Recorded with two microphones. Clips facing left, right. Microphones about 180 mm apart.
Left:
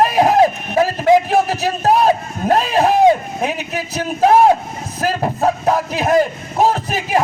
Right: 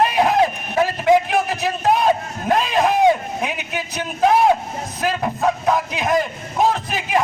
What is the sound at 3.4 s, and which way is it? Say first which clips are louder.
Speech: left 4 dB; 40° left (ahead or behind).